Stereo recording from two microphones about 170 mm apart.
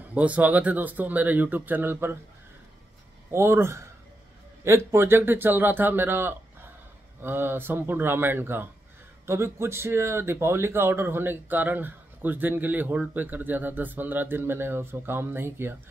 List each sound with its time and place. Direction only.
0.1 s speech: 10° right (ahead or behind)
3.3 s speech: 15° right (ahead or behind)